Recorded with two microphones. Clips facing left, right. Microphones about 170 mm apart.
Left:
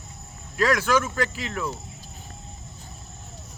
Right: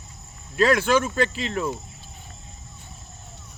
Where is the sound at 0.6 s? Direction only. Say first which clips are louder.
Right 3 dB; 25° right (ahead or behind).